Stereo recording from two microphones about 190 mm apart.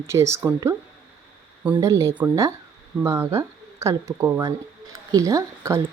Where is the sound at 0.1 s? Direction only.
15° right (ahead or behind).